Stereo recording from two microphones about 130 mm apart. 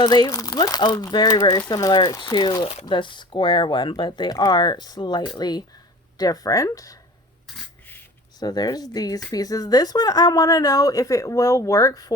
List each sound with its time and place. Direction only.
0.0 s speech: 35° left (ahead or behind)
8.4 s speech: 30° left (ahead or behind)